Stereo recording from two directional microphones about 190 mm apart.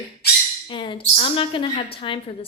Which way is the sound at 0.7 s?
25° left (ahead or behind).